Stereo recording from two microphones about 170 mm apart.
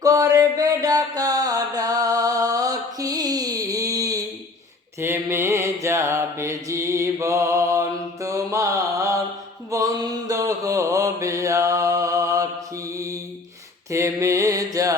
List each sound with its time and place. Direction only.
0.0 s music: 20° right (ahead or behind)
4.9 s mantra: 15° right (ahead or behind)